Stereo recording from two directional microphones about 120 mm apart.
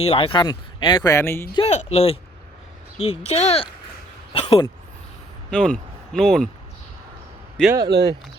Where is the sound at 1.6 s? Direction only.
60° left (ahead or behind).